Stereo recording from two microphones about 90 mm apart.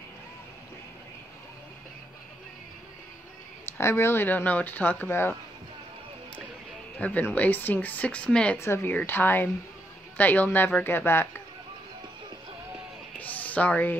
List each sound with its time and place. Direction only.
3.7 s speech: 25° left (ahead or behind)
7.0 s speech: 15° left (ahead or behind)
8.5 s speech: 25° left (ahead or behind)
13.2 s music: 15° left (ahead or behind)